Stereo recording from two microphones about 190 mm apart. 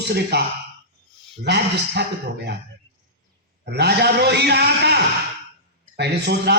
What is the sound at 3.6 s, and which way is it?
A man's voice, 60° right (ahead or behind).